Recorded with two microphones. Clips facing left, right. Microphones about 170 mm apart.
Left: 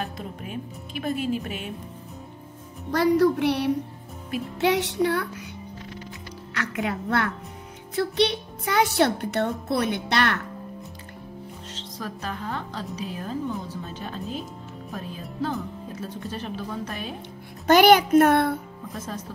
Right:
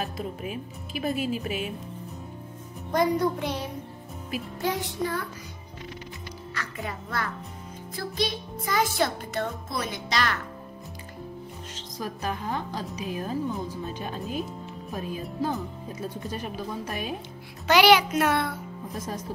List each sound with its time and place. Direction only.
0.0 s speech: 5° right (ahead or behind)
2.9 s speech: 75° left (ahead or behind)
4.6 s speech: 80° left
6.5 s a child's voice: 75° left (ahead or behind)
11.7 s a woman's voice: 15° right (ahead or behind)
15.9 s a woman's voice: 10° right (ahead or behind)
17.6 s a child's voice: 50° left (ahead or behind)
18.9 s a woman's voice: 10° right (ahead or behind)